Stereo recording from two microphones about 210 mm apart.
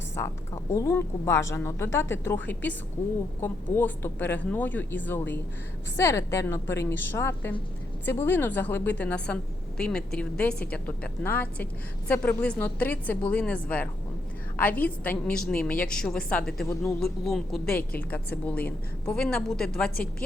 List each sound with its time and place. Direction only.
0.2 s a woman's voice: 15° left (ahead or behind)